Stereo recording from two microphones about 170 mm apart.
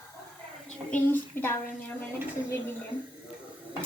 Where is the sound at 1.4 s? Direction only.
15° left (ahead or behind).